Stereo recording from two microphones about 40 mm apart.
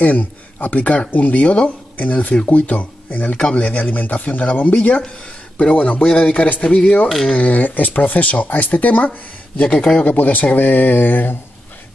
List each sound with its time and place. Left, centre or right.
0.0 s a man's voice: left
9.6 s a man's voice: left